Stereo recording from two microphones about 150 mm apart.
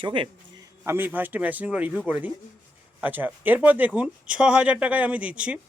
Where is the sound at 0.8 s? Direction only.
15° right (ahead or behind).